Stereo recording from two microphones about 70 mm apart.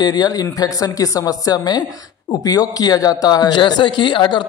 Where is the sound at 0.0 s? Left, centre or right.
Left.